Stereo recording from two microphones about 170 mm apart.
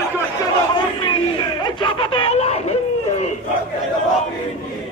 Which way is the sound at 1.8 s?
35° left (ahead or behind).